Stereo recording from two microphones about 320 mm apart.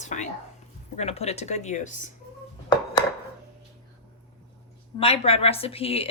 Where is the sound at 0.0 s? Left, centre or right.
Left.